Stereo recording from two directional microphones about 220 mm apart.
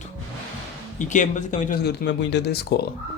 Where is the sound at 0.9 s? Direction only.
35° left (ahead or behind).